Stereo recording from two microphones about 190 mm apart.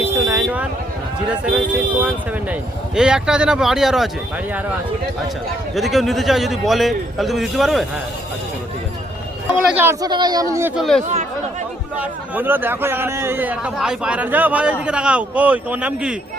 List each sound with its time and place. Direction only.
0.0 s vehicle: 10° right (ahead or behind)
2.0 s speech: 5° right (ahead or behind)
5.7 s speech: centre (ahead or behind)
9.5 s speech: 5° right (ahead or behind)
10.8 s speech: centre (ahead or behind)
11.9 s speech: 10° right (ahead or behind)